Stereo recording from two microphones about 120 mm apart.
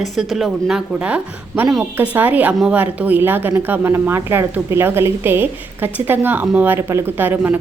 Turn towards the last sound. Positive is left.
turn(degrees=-15)  # may be behind; listen again after turning